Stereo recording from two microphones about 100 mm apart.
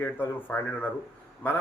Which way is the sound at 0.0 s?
20° left (ahead or behind).